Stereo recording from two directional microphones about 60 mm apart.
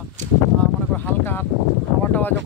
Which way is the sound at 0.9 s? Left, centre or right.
Left.